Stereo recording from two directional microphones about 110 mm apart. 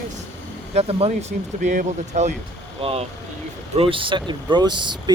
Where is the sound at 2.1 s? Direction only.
90° right.